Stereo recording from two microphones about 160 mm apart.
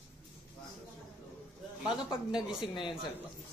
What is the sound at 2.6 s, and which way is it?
Speech, 30° left (ahead or behind).